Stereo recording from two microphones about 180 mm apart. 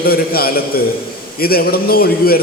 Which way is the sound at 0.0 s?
55° left (ahead or behind).